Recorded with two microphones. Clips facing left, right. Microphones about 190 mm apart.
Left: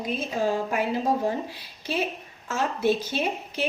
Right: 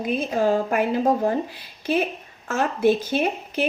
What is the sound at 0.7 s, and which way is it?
Speech, 50° right (ahead or behind).